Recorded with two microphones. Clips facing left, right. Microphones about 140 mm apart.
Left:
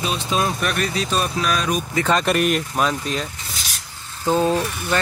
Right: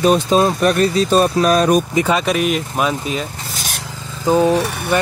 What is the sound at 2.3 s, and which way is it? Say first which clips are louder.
Speech: right 2 dB; centre (ahead or behind).